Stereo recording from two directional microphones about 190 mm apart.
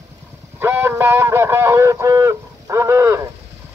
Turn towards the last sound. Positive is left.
turn(degrees=-15)  # may be behind; listen again after turning